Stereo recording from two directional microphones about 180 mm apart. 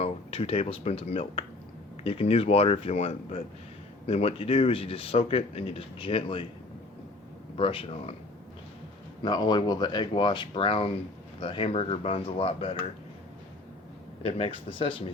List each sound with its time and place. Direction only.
0.0 s speech: 30° left (ahead or behind)
7.5 s speech: 30° left (ahead or behind)
9.2 s speech: 25° left (ahead or behind)
14.2 s speech: 30° left (ahead or behind)